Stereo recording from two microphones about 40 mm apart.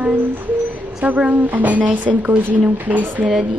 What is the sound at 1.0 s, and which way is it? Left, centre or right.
A woman's voice, right.